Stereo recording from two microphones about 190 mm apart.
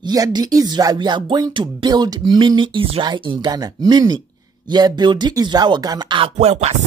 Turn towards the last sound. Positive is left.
turn(degrees=-35)  # may be behind; listen again after turning